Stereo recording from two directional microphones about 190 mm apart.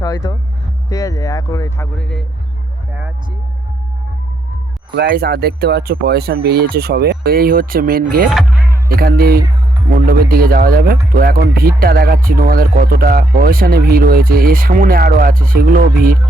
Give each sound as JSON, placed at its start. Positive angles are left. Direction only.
{"t": 0.0, "sound": "speech", "side_deg": 20}
{"t": 2.0, "sound": "speech", "side_deg": 5}
{"t": 4.9, "sound": "speech", "side_deg": -55}
{"t": 8.3, "sound": "music", "side_deg": 0}
{"t": 8.9, "sound": "speech", "side_deg": -50}